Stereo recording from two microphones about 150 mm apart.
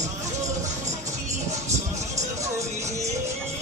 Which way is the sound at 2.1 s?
20° right (ahead or behind).